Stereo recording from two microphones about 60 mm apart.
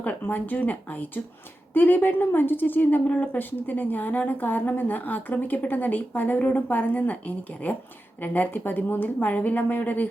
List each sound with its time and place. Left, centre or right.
0.0 s a woman's voice: left